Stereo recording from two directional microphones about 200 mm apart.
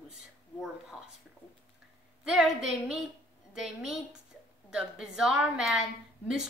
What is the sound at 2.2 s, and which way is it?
Speech, centre (ahead or behind).